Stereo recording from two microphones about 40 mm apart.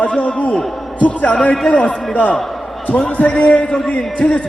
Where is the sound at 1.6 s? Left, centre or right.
Left.